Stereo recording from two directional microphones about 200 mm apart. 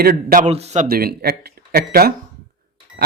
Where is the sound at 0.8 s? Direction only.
50° right (ahead or behind).